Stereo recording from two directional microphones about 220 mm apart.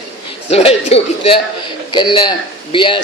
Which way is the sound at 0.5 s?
30° left (ahead or behind).